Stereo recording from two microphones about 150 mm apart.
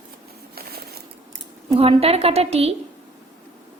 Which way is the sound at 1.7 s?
40° right (ahead or behind).